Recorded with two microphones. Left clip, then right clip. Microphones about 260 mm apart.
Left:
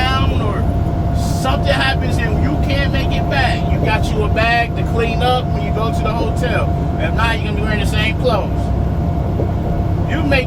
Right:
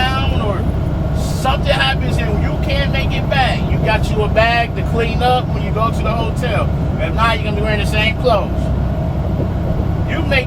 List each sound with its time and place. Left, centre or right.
4.4 s vehicle: right